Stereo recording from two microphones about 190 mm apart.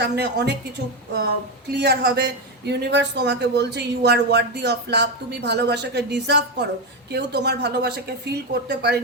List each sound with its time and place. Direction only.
0.0 s speech: 60° right (ahead or behind)
1.7 s speech: 60° right (ahead or behind)